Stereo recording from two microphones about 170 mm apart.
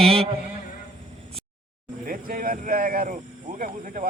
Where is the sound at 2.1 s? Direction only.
55° right (ahead or behind).